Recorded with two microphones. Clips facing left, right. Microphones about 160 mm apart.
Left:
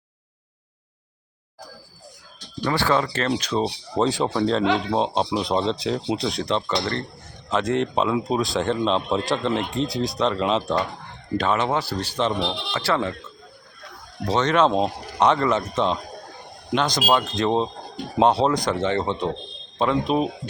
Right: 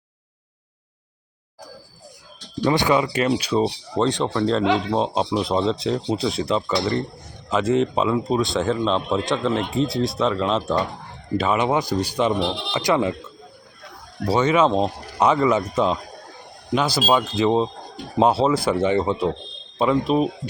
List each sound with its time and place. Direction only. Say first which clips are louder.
2.6 s speech: right 3 dB; 15° right (ahead or behind)
3.9 s a man's voice: even; 5° left (ahead or behind); by 13.1 s 15° right (ahead or behind)
14.3 s speech: right 2 dB; 10° right (ahead or behind)
14.7 s speech: right 1 dB; 10° left (ahead or behind)
15.2 s a man's voice: right 1 dB; 5° right (ahead or behind)